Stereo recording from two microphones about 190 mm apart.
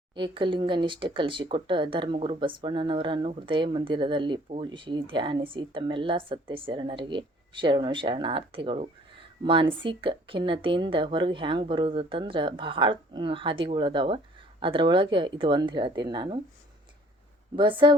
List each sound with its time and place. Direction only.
0.1 s speech: 25° right (ahead or behind)
17.6 s speech: 25° right (ahead or behind)